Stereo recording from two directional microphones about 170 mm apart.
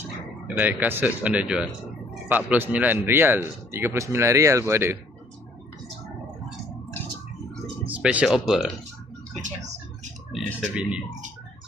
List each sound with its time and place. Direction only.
0.4 s a man's voice: 10° right (ahead or behind)
7.9 s speech: 5° right (ahead or behind)
10.3 s speech: 5° right (ahead or behind)